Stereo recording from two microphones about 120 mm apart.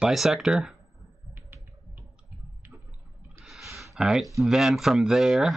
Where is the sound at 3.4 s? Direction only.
Centre (ahead or behind).